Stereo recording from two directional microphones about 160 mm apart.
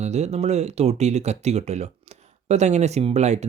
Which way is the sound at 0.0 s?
45° right (ahead or behind).